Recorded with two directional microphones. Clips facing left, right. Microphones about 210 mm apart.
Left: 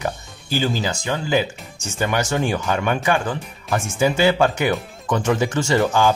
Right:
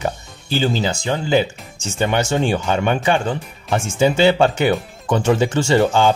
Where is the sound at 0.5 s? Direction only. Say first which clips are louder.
Right 3 dB; 25° right (ahead or behind).